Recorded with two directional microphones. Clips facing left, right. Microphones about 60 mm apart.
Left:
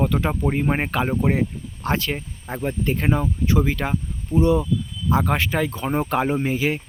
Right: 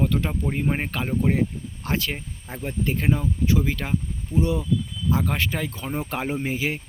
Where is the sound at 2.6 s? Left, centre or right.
Left.